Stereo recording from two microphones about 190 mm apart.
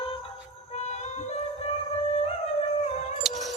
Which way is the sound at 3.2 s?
Centre (ahead or behind).